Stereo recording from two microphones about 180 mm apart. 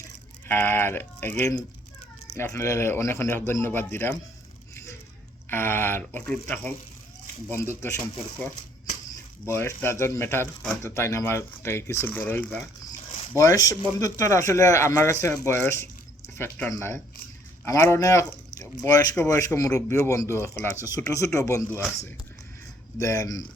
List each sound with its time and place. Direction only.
0.4 s speech: 10° left (ahead or behind)
5.5 s speech: 10° left (ahead or behind)
9.5 s speech: 15° left (ahead or behind)
10.6 s speech: centre (ahead or behind)
10.9 s speech: 15° left (ahead or behind)
23.0 s speech: 20° left (ahead or behind)